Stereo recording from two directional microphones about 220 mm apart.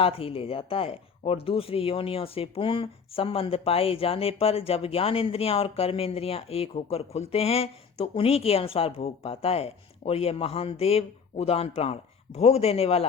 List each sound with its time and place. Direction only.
0.0 s speech: 25° left (ahead or behind)